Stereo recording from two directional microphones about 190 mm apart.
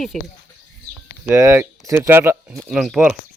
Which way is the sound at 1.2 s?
15° right (ahead or behind).